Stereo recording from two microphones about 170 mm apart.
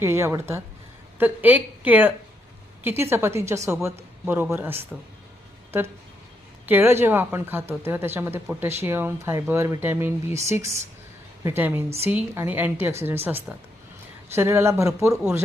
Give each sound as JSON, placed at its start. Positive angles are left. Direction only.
{"t": 0.0, "sound": "a woman's voice", "side_deg": -15}
{"t": 6.7, "sound": "a woman's voice", "side_deg": -15}
{"t": 14.3, "sound": "a woman's voice", "side_deg": -15}